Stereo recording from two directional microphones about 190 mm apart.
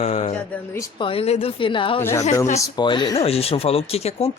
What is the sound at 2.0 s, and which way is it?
A woman's voice, 15° left (ahead or behind).